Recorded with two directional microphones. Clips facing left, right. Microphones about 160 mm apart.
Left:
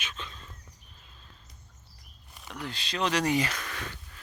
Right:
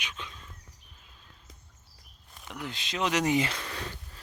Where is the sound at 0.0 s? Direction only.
15° right (ahead or behind).